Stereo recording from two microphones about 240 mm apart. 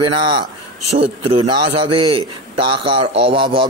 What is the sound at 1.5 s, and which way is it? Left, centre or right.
Speech, right.